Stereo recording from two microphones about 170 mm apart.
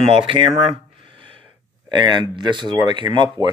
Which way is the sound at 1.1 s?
30° right (ahead or behind).